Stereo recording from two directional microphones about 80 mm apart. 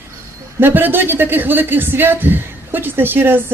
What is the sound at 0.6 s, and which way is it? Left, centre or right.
A man's voice, right.